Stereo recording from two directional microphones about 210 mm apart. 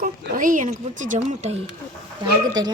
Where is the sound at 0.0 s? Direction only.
40° right (ahead or behind).